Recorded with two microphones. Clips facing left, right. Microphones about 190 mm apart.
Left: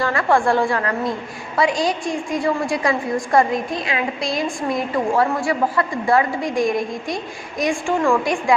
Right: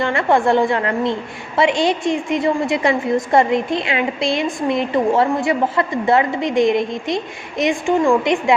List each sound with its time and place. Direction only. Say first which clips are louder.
0.0 s a woman's voice: right 2 dB; 25° right (ahead or behind)